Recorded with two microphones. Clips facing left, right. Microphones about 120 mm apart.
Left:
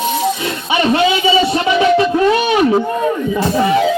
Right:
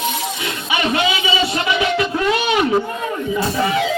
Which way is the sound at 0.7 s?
30° left (ahead or behind).